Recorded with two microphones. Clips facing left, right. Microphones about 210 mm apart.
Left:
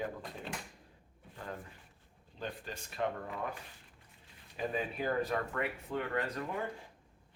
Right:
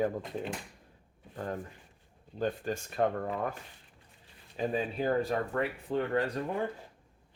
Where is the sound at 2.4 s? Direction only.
45° right (ahead or behind).